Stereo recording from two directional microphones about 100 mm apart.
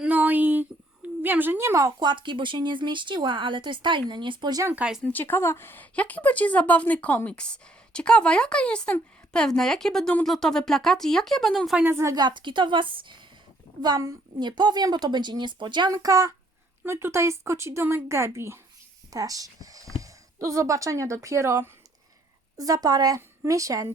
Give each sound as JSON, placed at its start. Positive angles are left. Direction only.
{"t": 0.0, "sound": "a sound", "side_deg": -15}
{"t": 2.0, "sound": "speech", "side_deg": -50}
{"t": 4.7, "sound": "speech", "side_deg": -10}
{"t": 5.0, "sound": "speech", "side_deg": 20}
{"t": 11.9, "sound": "speech", "side_deg": -25}
{"t": 12.1, "sound": "speech", "side_deg": -45}
{"t": 13.8, "sound": "speech", "side_deg": -40}
{"t": 16.0, "sound": "a woman's voice", "side_deg": -35}